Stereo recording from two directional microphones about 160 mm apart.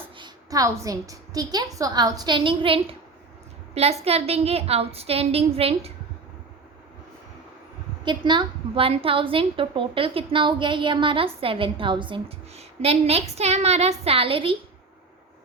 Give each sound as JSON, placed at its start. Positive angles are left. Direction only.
{"t": 0.2, "sound": "a woman's voice", "side_deg": -20}
{"t": 8.0, "sound": "a woman's voice", "side_deg": -30}